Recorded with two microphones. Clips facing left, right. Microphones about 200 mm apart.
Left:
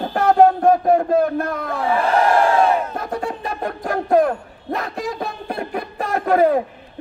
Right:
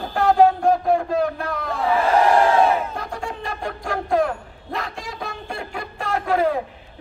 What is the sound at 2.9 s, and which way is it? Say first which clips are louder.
Music: left 5 dB; 45° left (ahead or behind).